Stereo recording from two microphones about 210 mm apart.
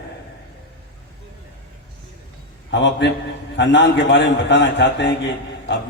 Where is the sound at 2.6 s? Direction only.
55° left (ahead or behind).